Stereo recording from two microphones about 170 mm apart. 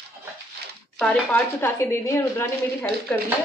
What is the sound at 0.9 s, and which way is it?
Speech, 5° left (ahead or behind).